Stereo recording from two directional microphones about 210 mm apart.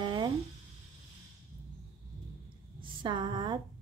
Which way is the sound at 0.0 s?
20° right (ahead or behind).